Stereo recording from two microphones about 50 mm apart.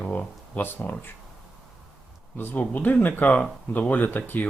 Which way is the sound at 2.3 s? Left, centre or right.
Left.